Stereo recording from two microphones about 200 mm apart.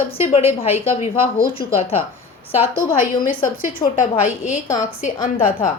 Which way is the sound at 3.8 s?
20° left (ahead or behind).